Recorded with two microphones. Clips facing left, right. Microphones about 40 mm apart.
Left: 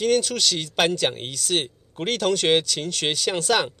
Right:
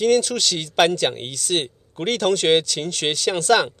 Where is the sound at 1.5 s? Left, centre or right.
Centre.